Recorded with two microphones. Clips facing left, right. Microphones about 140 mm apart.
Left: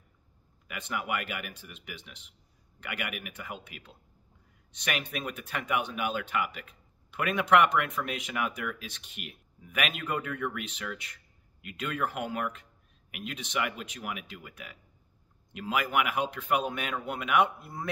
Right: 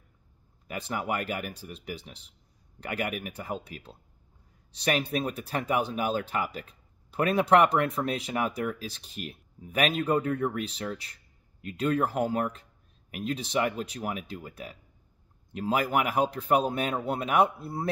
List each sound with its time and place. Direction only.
0.7 s speech: 35° right (ahead or behind)